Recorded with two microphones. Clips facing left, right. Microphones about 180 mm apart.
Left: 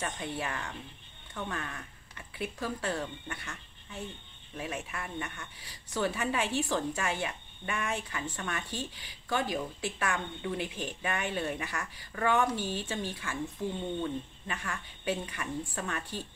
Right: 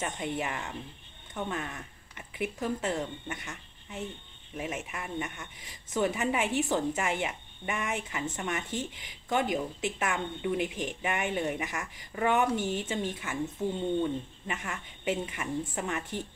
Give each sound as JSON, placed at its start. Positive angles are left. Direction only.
{"t": 0.0, "sound": "speech", "side_deg": -20}
{"t": 14.5, "sound": "speech", "side_deg": -20}